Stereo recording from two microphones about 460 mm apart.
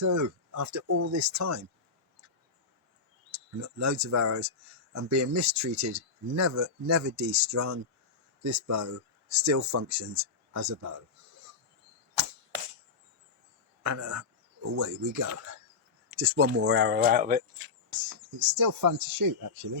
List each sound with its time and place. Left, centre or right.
0.0 s speech: right
3.3 s speech: right
12.5 s a sound: right
13.8 s speech: right; by 17.7 s centre
17.9 s speech: right